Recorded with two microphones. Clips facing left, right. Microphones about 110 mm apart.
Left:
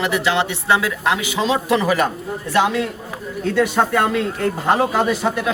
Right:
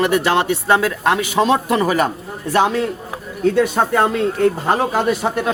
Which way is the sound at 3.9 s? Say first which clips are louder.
Right 2 dB; 35° right (ahead or behind).